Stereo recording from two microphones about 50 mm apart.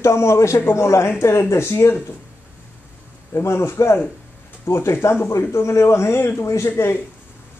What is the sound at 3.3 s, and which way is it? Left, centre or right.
A man's voice, left.